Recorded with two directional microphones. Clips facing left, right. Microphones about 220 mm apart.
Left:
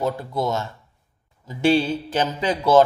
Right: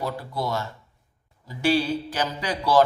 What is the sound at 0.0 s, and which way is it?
Speech, 20° left (ahead or behind).